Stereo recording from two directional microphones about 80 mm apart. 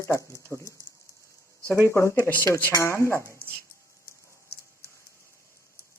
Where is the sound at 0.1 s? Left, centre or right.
Left.